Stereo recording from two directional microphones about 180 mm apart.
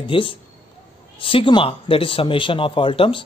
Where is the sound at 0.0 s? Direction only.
30° left (ahead or behind).